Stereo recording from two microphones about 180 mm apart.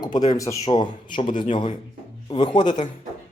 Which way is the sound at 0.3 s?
20° left (ahead or behind).